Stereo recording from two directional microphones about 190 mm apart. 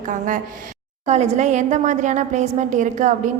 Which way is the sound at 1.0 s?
35° right (ahead or behind).